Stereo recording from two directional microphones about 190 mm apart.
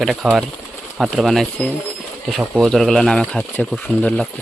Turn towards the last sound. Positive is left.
turn(degrees=10)  # may be behind; listen again after turning